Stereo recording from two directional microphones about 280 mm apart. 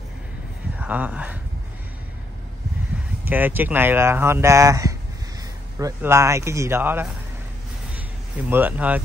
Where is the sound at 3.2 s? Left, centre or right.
Centre.